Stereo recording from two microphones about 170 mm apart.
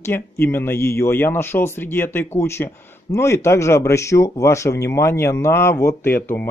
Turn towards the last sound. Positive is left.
turn(degrees=15)  # may be behind; listen again after turning